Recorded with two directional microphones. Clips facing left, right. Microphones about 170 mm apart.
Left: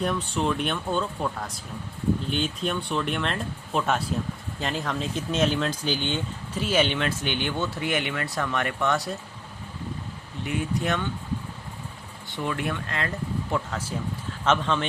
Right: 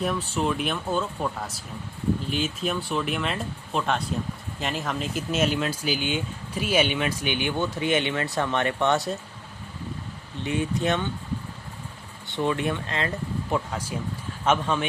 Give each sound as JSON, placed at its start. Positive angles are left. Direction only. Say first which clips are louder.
{"t": 0.0, "sound": "speech", "louder": "even", "side_deg": 0}
{"t": 10.4, "sound": "speech", "louder": "right 2 dB", "side_deg": -25}
{"t": 12.4, "sound": "speech", "louder": "right 4 dB", "side_deg": -25}